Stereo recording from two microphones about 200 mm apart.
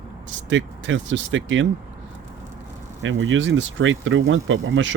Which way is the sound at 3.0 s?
70° right (ahead or behind).